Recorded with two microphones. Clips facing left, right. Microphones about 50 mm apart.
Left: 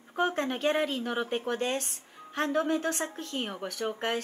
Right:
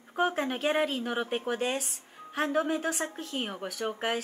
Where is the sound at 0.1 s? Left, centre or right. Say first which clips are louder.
Even; centre.